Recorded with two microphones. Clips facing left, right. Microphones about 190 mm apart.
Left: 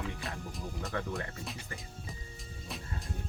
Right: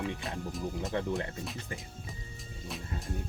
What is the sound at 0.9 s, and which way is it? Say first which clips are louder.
Speech: right 3 dB; 20° right (ahead or behind).